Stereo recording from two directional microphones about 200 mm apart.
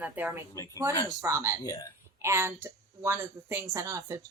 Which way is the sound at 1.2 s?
15° right (ahead or behind).